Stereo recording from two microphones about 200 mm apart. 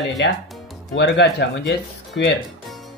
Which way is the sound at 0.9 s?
60° left (ahead or behind).